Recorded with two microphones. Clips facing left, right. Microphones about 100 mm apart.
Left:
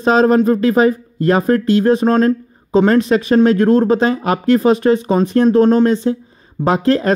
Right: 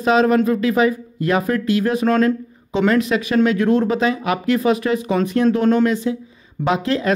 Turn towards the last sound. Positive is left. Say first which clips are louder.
# left 5 dB
turn(degrees=35)  # may be behind; listen again after turning